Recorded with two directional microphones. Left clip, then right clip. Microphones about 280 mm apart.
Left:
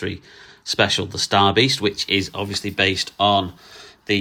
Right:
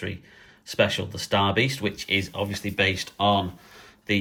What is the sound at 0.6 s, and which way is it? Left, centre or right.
Speech, centre.